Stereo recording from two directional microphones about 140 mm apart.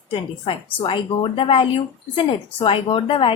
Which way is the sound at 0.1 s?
40° left (ahead or behind).